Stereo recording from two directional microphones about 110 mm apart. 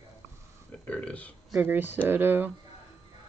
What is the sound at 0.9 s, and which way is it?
Speech, 10° left (ahead or behind).